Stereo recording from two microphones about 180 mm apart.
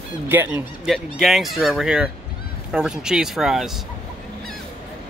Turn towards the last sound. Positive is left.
turn(degrees=0)  # may be behind; listen again after turning